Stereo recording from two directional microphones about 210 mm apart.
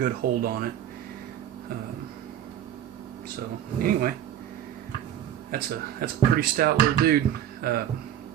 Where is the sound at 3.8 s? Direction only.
45° right (ahead or behind).